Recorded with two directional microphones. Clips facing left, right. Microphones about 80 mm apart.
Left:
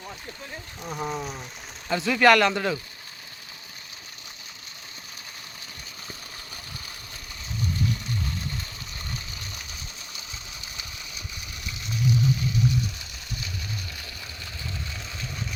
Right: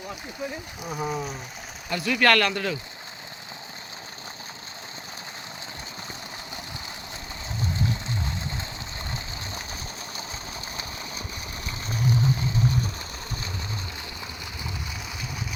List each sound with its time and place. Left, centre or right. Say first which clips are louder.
0.8 s speech: right 1 dB; centre
1.9 s speech: left 3 dB; centre
11.6 s a sound: even; right